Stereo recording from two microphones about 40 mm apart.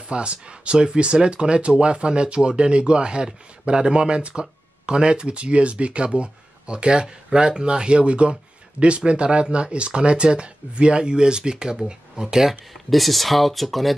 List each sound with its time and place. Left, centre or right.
0.1 s speech: right
12.4 s speech: centre